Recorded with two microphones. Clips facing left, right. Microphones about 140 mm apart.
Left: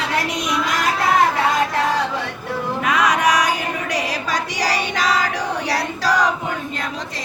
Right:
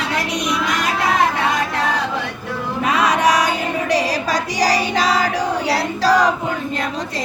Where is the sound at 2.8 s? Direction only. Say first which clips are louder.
Right 2 dB; 30° right (ahead or behind).